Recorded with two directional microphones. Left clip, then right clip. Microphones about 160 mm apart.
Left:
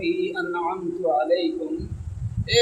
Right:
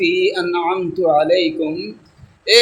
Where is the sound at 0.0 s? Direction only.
50° right (ahead or behind).